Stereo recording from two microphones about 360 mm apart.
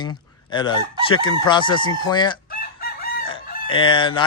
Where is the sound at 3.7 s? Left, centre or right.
Centre.